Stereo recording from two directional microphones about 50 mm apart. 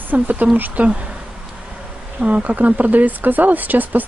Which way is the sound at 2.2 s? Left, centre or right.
Right.